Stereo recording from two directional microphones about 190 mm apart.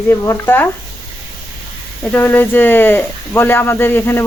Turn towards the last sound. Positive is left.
turn(degrees=10)  # may be behind; listen again after turning